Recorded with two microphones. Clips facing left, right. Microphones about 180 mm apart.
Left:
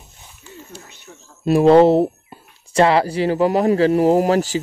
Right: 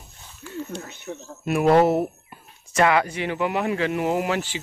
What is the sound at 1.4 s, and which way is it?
Speech, 30° left (ahead or behind).